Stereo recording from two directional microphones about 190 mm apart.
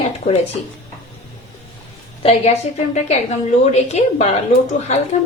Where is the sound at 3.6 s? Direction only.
35° left (ahead or behind).